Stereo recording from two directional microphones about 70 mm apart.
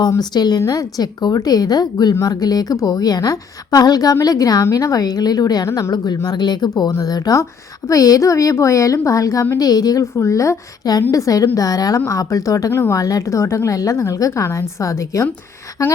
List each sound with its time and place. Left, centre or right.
0.2 s speech: left
0.7 s a woman's voice: left
6.2 s speech: left
6.9 s a woman's voice: left
9.6 s a woman's voice: left
10.0 s a woman's voice: left
11.9 s a woman's voice: left